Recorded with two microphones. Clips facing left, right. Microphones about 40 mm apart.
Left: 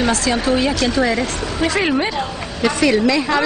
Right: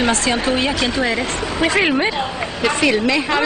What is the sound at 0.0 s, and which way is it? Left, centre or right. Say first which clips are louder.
A woman's voice: even; right.